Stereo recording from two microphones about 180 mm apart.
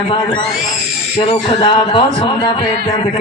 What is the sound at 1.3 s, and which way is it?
A man's voice, 30° left (ahead or behind).